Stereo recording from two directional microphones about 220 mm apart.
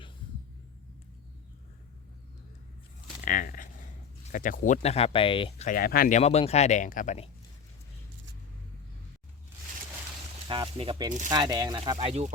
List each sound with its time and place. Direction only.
3.2 s speech: 40° left (ahead or behind)
10.5 s speech: 25° right (ahead or behind)